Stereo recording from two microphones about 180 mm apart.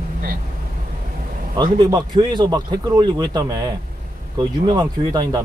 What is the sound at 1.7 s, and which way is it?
A man's voice, 25° right (ahead or behind).